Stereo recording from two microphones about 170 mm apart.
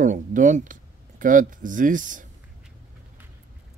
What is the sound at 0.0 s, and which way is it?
Speech, 50° right (ahead or behind).